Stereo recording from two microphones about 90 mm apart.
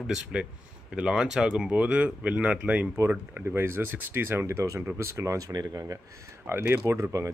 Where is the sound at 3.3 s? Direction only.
25° right (ahead or behind).